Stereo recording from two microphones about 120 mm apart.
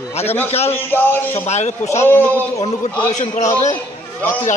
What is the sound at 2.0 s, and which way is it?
Speech, 15° left (ahead or behind).